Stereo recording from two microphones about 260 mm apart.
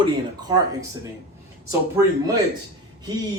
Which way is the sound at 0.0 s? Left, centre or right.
Centre.